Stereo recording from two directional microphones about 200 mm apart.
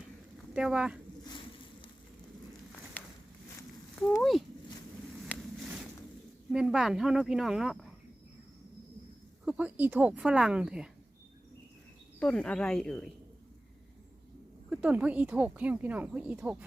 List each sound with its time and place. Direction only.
0.5 s speech: 5° right (ahead or behind)
1.2 s boat: 25° left (ahead or behind)
3.0 s a sound: 10° left (ahead or behind)
3.9 s speech: 10° left (ahead or behind)
5.2 s a sound: centre (ahead or behind)
6.5 s speech: 5° right (ahead or behind)
9.5 s speech: 5° right (ahead or behind)
12.2 s speech: 5° left (ahead or behind)
14.7 s speech: 5° right (ahead or behind)